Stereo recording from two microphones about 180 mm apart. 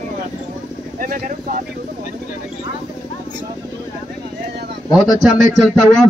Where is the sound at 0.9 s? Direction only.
50° right (ahead or behind).